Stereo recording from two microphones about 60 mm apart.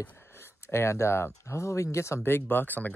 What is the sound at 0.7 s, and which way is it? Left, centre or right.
Speech, left.